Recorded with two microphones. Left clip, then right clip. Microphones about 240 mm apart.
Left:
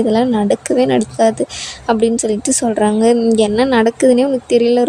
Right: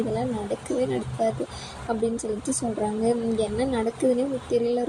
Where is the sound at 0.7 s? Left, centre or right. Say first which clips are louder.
Left 11 dB; left.